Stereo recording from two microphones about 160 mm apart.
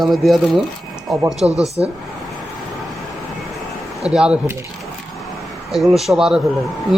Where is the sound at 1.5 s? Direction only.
20° left (ahead or behind).